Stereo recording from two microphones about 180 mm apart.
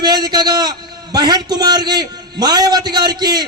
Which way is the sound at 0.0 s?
25° right (ahead or behind).